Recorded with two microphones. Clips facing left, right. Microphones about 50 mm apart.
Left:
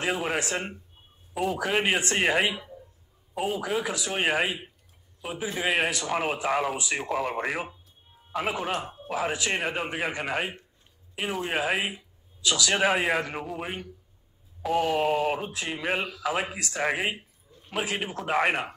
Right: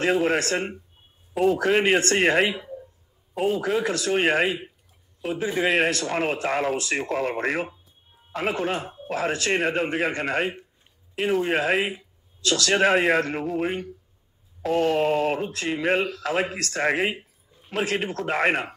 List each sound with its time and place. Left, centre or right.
0.0 s a man's voice: centre
8.7 s speech: centre
9.1 s a man's voice: centre
17.2 s a sound: centre
17.7 s a man's voice: centre